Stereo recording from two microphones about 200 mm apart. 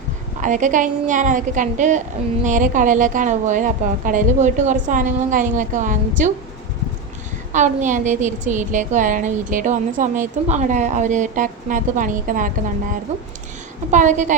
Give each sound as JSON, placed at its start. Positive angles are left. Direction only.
{"t": 0.4, "sound": "a woman's voice", "side_deg": -40}
{"t": 7.5, "sound": "a woman's voice", "side_deg": -40}
{"t": 13.9, "sound": "a woman's voice", "side_deg": -35}